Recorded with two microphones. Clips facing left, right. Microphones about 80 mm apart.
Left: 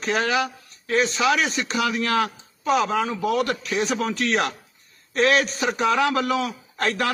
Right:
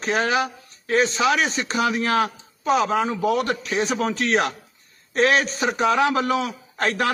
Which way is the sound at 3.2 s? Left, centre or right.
Right.